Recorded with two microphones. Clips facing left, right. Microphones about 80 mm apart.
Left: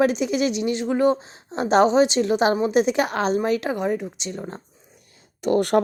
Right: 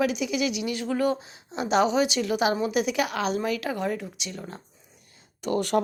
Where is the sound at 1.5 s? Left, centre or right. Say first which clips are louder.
Left 6 dB; left.